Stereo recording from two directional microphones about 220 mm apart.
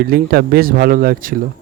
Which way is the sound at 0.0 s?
45° right (ahead or behind).